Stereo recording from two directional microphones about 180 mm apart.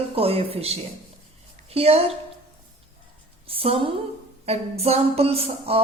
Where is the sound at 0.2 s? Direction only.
35° right (ahead or behind).